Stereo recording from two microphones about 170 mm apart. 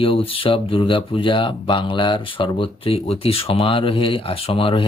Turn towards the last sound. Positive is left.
turn(degrees=30)  # may be behind; listen again after turning